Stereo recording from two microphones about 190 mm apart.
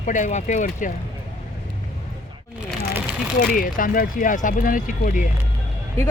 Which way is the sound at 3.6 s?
45° left (ahead or behind).